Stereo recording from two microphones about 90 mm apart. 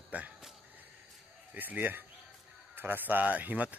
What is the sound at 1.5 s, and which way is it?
A man's voice, 20° right (ahead or behind).